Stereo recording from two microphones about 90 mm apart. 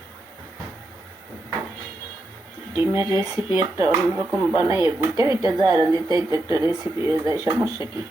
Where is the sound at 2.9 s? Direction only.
35° right (ahead or behind).